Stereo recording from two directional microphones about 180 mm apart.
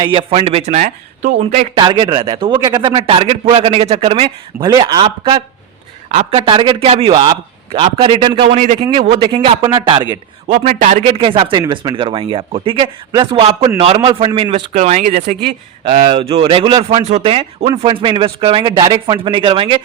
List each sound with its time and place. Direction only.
0.0 s a man's voice: 30° right (ahead or behind)
6.1 s a man's voice: 35° right (ahead or behind)
9.0 s a man's voice: 25° right (ahead or behind)
10.5 s speech: 40° right (ahead or behind)
11.1 s a man's voice: 25° right (ahead or behind)
14.8 s speech: 40° right (ahead or behind)
15.8 s a man's voice: 30° right (ahead or behind)